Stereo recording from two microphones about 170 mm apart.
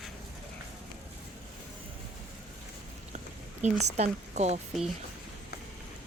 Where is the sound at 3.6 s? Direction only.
45° right (ahead or behind).